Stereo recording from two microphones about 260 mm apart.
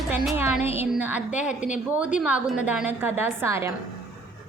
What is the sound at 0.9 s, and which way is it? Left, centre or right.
A woman's voice, centre.